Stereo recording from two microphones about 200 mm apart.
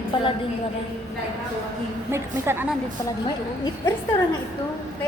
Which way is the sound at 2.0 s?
15° right (ahead or behind).